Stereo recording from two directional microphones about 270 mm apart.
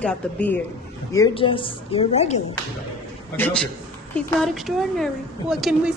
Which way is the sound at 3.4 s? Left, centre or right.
Centre.